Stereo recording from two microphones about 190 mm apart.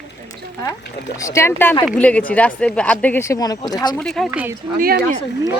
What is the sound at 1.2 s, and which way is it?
Speech, 15° left (ahead or behind).